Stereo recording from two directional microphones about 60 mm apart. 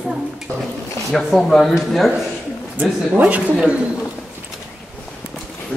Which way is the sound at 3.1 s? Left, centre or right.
Right.